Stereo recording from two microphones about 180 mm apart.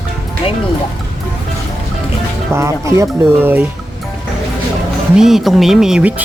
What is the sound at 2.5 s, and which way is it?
Speech, 15° right (ahead or behind).